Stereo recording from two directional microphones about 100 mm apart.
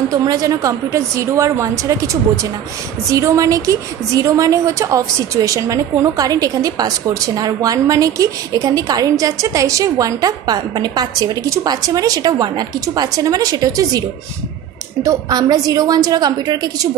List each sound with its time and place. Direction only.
0.1 s a woman's voice: 35° right (ahead or behind)
15.0 s a woman's voice: 40° right (ahead or behind)